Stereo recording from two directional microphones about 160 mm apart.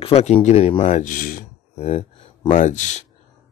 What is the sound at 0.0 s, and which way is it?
Speech, 40° left (ahead or behind).